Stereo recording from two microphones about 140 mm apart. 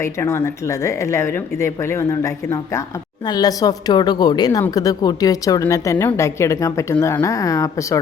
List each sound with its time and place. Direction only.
0.0 s speech: 20° left (ahead or behind)